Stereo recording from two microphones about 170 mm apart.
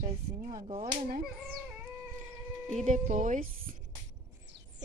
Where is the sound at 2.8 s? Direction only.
50° right (ahead or behind).